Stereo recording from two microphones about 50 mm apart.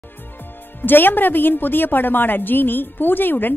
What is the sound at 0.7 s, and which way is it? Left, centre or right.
A woman's voice, left.